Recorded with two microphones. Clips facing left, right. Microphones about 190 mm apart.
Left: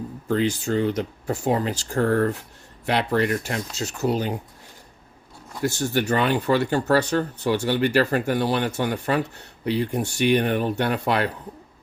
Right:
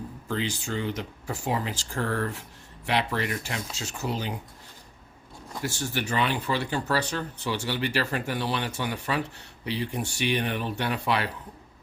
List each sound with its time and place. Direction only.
0.3 s speech: 45° left (ahead or behind)
5.6 s speech: 45° left (ahead or behind)